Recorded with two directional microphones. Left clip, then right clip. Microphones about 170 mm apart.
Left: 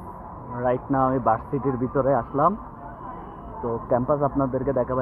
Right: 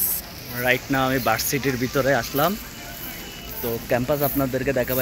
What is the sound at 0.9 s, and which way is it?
Speech, 40° right (ahead or behind).